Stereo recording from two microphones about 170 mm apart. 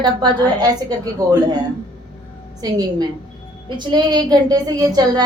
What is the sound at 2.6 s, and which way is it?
A woman's voice, 25° right (ahead or behind).